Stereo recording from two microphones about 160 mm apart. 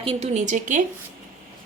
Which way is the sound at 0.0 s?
40° right (ahead or behind).